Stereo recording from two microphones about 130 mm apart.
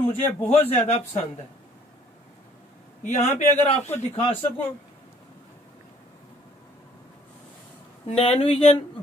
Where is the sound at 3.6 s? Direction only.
55° left (ahead or behind).